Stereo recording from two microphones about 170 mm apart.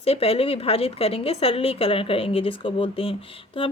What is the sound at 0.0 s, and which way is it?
A woman's voice, 35° left (ahead or behind).